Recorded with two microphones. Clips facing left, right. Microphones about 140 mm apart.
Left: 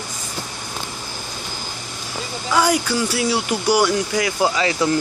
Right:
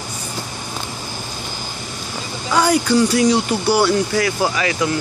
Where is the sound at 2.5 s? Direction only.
10° left (ahead or behind).